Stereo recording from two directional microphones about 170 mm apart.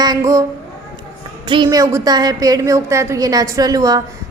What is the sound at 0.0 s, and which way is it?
Speech, 20° right (ahead or behind).